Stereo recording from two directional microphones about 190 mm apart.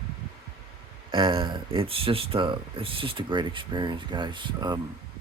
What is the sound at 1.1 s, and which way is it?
Speech, 25° right (ahead or behind).